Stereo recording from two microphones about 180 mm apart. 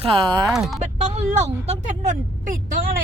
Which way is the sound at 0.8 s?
40° right (ahead or behind).